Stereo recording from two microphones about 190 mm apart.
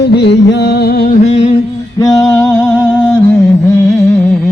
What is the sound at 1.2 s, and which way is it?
Music, 35° left (ahead or behind).